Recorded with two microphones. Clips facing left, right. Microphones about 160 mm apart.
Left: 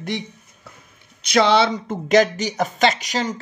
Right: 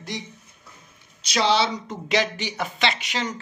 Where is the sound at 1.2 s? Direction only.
55° left (ahead or behind); by 3.3 s 40° left (ahead or behind).